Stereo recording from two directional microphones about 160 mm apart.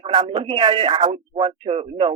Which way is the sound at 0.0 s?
30° right (ahead or behind).